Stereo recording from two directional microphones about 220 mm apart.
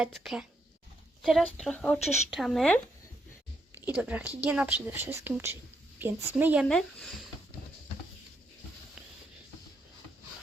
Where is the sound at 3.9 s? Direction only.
5° right (ahead or behind).